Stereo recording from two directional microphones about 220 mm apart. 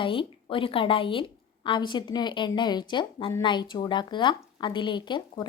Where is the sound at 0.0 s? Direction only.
25° left (ahead or behind).